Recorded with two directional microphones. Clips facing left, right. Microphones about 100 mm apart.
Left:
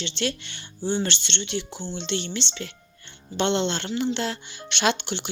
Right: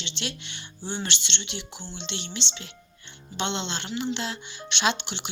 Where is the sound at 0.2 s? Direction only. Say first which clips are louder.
Left 8 dB; 40° left (ahead or behind).